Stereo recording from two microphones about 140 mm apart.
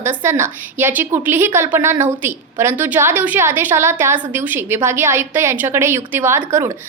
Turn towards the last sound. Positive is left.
turn(degrees=-20)  # may be behind; listen again after turning